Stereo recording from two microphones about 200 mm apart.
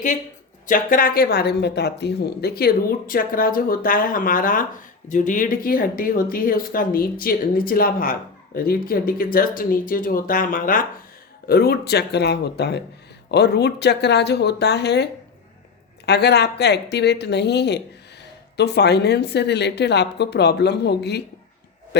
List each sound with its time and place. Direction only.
0.7 s a woman's voice: 45° left (ahead or behind)